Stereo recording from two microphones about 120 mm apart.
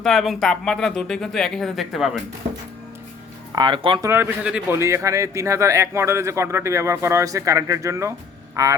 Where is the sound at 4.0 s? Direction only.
20° right (ahead or behind).